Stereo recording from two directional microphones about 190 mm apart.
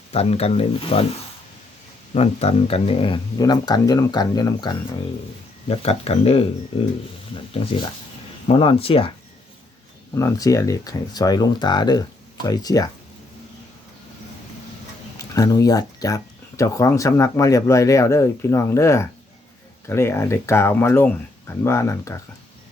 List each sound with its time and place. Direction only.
0.1 s speech: 30° left (ahead or behind)
2.1 s speech: 35° left (ahead or behind)
5.6 s speech: 30° left (ahead or behind)
10.2 s speech: 15° left (ahead or behind)
15.2 s speech: 15° left (ahead or behind)